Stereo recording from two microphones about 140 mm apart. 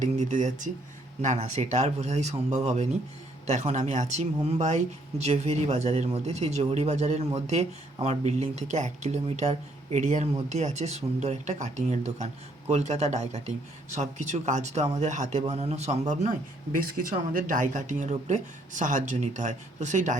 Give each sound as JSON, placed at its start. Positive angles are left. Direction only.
{"t": 0.0, "sound": "speech", "side_deg": -60}
{"t": 16.8, "sound": "speech", "side_deg": -75}